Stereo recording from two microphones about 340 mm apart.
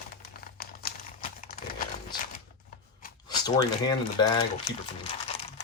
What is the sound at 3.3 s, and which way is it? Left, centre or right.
Speech, centre.